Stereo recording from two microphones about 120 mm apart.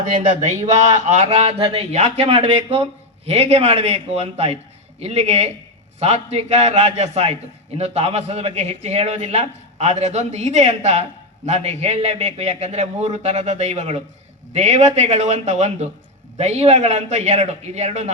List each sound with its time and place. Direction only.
0.1 s a man's voice: 85° right; by 18.1 s 70° right (ahead or behind)